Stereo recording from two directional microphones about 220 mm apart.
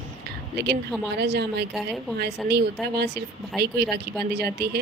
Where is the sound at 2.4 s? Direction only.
Centre (ahead or behind).